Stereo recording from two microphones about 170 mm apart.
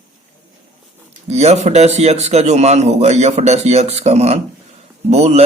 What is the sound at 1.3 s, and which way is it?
A man's voice, 40° right (ahead or behind).